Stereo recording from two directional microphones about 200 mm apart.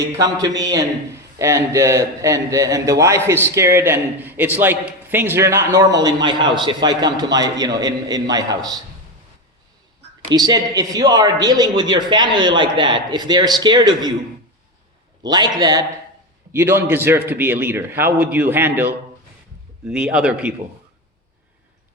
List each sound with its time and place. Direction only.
0.0 s a man's voice: 15° right (ahead or behind)
10.2 s a man's voice: 20° right (ahead or behind)
15.2 s a man's voice: 20° right (ahead or behind)